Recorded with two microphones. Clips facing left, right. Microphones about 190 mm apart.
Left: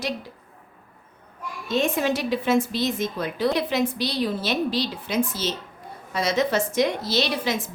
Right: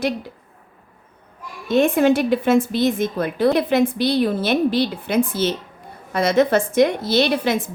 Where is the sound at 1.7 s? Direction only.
55° right (ahead or behind).